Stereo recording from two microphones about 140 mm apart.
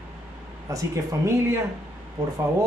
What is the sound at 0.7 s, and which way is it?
Speech, 25° right (ahead or behind).